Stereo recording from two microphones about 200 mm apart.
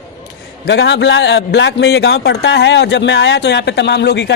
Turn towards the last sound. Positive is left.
turn(degrees=60)  # may be behind; listen again after turning